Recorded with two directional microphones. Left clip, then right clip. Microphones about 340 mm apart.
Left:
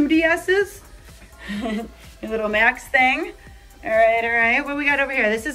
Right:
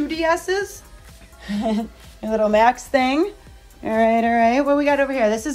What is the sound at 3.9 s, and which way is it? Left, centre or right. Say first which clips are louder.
Speech: left 1 dB; right.